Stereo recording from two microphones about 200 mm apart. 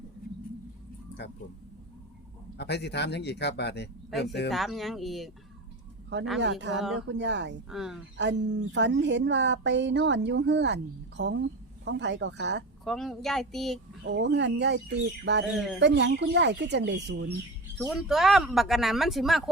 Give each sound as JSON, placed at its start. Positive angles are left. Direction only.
{"t": 1.2, "sound": "a man's voice", "side_deg": 60}
{"t": 2.6, "sound": "a man's voice", "side_deg": 55}
{"t": 4.5, "sound": "speech", "side_deg": 0}
{"t": 6.4, "sound": "speech", "side_deg": -60}
{"t": 7.7, "sound": "speech", "side_deg": 0}
{"t": 8.2, "sound": "speech", "side_deg": -60}
{"t": 12.8, "sound": "speech", "side_deg": 0}
{"t": 14.1, "sound": "speech", "side_deg": -60}
{"t": 15.5, "sound": "speech", "side_deg": 0}
{"t": 15.8, "sound": "speech", "side_deg": -60}
{"t": 17.7, "sound": "speech", "side_deg": 0}